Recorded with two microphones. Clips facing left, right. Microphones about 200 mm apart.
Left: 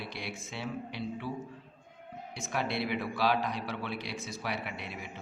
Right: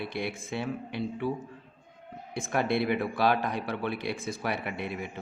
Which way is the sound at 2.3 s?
55° right (ahead or behind).